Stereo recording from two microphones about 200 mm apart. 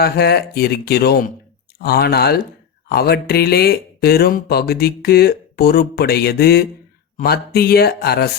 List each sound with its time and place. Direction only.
0.0 s speech: 50° left (ahead or behind)